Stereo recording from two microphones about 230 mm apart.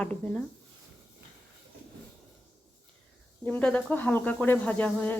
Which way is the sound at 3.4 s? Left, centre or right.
Centre.